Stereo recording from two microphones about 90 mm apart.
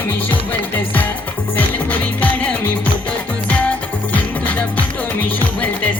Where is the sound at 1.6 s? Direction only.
20° left (ahead or behind).